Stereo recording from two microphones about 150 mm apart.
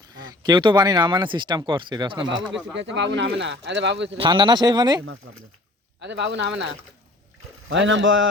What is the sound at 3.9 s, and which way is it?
Speech, 35° right (ahead or behind).